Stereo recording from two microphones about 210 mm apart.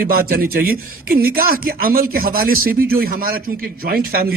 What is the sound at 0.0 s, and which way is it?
Speech, 45° right (ahead or behind).